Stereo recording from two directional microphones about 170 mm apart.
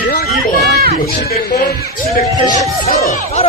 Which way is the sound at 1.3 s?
65° left (ahead or behind).